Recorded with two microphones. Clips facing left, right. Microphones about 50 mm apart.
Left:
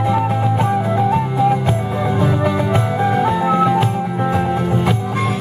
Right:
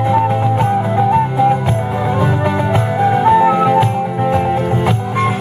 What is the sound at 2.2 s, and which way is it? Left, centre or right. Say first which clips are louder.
Music: even; centre.